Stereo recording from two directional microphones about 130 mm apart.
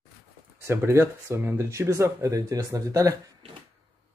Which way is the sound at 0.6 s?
20° right (ahead or behind).